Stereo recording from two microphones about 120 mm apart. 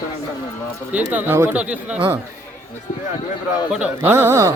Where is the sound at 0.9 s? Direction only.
15° right (ahead or behind).